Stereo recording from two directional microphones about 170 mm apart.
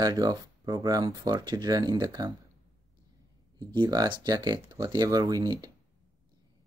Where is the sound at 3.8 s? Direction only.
25° right (ahead or behind).